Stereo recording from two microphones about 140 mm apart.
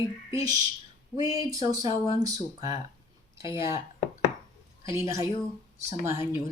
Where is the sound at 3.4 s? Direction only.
20° right (ahead or behind).